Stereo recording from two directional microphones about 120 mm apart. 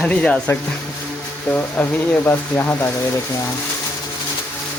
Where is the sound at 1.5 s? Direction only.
15° left (ahead or behind).